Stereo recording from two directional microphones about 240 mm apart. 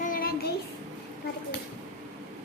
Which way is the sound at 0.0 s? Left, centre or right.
Left.